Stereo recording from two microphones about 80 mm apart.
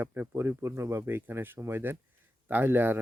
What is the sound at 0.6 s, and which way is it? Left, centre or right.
Speech, right.